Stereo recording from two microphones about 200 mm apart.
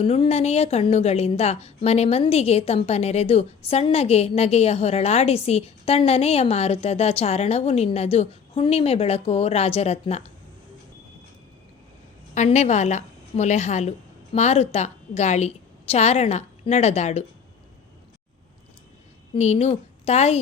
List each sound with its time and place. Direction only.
0.0 s a woman's voice: 30° left (ahead or behind)
12.3 s a woman's voice: 35° left (ahead or behind)
19.3 s a woman's voice: 35° left (ahead or behind)